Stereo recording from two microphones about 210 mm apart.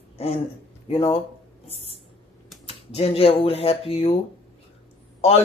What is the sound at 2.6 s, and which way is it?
Speech, 30° left (ahead or behind).